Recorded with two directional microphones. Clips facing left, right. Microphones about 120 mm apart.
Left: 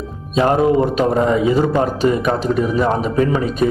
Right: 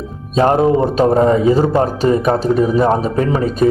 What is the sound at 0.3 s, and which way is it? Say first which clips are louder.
A man's voice: right 2 dB; 30° right (ahead or behind).